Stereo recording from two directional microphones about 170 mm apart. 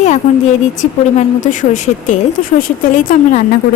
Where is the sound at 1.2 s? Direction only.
45° left (ahead or behind).